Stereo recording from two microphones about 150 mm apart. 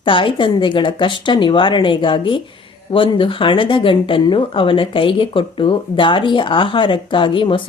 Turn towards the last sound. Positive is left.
turn(degrees=35)  # may be behind; listen again after turning